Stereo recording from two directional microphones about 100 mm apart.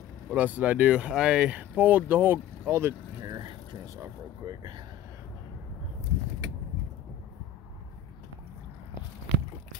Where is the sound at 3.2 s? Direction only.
45° right (ahead or behind).